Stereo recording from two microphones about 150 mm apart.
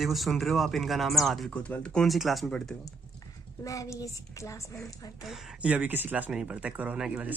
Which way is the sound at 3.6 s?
20° left (ahead or behind).